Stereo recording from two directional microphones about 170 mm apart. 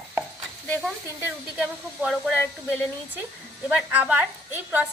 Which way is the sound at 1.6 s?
5° right (ahead or behind).